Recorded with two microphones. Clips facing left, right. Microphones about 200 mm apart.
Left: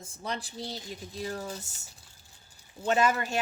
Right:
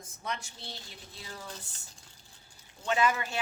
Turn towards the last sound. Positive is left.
turn(degrees=40)  # may be behind; listen again after turning